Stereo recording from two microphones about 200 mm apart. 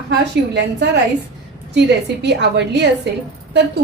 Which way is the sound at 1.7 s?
60° right (ahead or behind).